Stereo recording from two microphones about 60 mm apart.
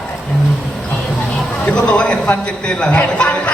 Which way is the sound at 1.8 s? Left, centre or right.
Centre.